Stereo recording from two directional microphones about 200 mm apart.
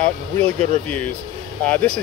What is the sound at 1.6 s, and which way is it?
Speech, 5° left (ahead or behind).